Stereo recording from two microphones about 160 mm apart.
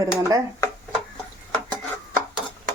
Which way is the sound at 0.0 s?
20° right (ahead or behind).